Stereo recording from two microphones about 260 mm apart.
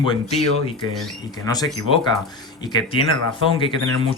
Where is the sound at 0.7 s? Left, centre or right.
Centre.